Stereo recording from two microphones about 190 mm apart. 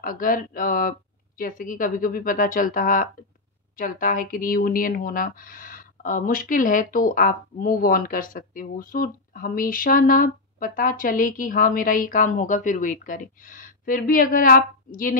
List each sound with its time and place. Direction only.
0.0 s speech: 45° left (ahead or behind)